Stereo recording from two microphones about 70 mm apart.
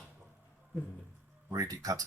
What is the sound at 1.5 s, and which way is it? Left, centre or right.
Speech, right.